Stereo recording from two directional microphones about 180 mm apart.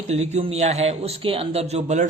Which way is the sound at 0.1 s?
40° right (ahead or behind).